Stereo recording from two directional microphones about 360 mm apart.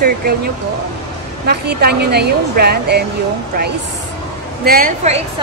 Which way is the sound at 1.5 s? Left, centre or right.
Right.